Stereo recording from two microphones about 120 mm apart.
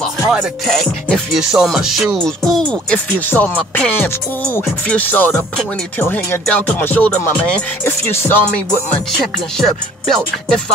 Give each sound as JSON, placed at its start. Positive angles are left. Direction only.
{"t": 0.0, "sound": "music", "side_deg": 0}
{"t": 9.6, "sound": "music", "side_deg": 0}